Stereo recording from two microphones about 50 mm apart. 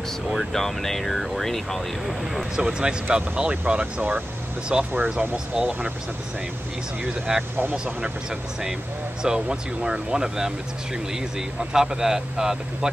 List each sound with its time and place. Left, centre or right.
0.5 s speech: centre
2.5 s speech: centre
4.7 s speech: centre
7.0 s speech: centre
9.2 s speech: centre